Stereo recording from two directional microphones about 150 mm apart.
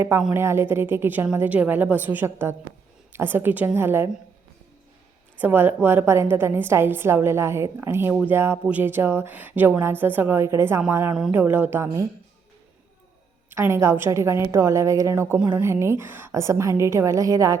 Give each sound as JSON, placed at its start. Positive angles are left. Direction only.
{"t": 0.3, "sound": "speech", "side_deg": -15}
{"t": 5.4, "sound": "speech", "side_deg": -15}
{"t": 11.1, "sound": "speech", "side_deg": -5}
{"t": 13.5, "sound": "a woman's voice", "side_deg": -15}